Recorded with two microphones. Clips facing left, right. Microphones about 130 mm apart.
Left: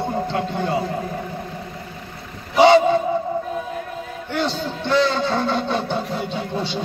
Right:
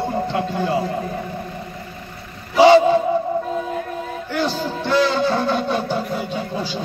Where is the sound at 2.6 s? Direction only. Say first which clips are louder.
Right 2 dB; 5° right (ahead or behind).